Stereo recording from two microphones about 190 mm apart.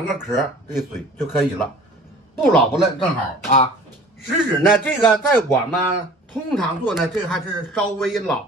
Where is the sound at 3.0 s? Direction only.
30° left (ahead or behind).